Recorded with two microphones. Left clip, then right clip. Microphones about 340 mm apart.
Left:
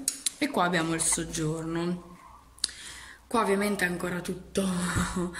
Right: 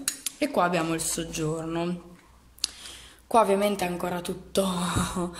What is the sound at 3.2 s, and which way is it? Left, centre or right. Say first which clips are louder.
A woman's voice: right 5 dB; centre.